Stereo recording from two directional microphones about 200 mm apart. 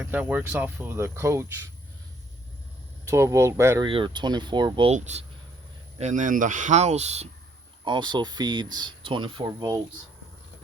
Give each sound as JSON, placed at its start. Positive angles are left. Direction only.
{"t": 0.0, "sound": "speech", "side_deg": -10}
{"t": 3.1, "sound": "speech", "side_deg": -15}
{"t": 3.8, "sound": "speech", "side_deg": -25}
{"t": 4.9, "sound": "speech", "side_deg": -35}
{"t": 7.9, "sound": "speech", "side_deg": -20}